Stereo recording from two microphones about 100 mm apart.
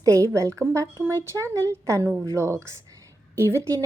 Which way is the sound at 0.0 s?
35° right (ahead or behind).